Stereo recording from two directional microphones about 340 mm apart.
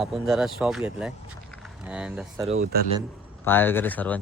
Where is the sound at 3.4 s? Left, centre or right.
Centre.